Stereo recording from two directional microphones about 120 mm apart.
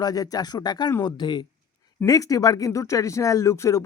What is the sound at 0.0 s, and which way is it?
Speech, 30° left (ahead or behind).